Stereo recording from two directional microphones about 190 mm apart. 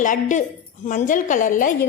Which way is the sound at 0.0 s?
40° left (ahead or behind).